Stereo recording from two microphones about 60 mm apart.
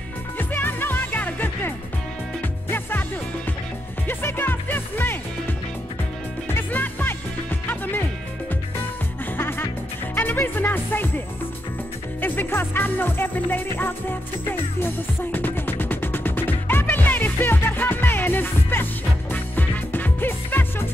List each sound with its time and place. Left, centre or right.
0.4 s music: left
2.7 s music: left
4.1 s music: left
6.5 s music: left
9.4 s music: left
12.2 s music: left
15.3 s music: left